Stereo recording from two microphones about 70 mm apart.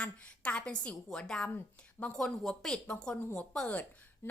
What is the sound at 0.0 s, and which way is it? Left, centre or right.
Speech, centre.